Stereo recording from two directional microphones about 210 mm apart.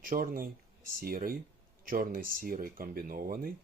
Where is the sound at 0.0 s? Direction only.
45° right (ahead or behind).